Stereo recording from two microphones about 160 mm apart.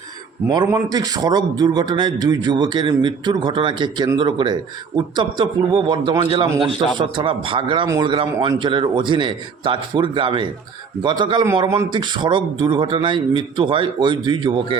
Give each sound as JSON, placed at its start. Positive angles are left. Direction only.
{"t": 0.5, "sound": "a man's voice", "side_deg": -25}